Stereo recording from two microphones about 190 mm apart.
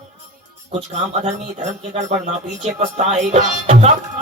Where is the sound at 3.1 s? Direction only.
35° right (ahead or behind).